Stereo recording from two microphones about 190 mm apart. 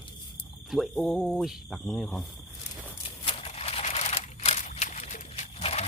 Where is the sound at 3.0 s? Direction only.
30° left (ahead or behind).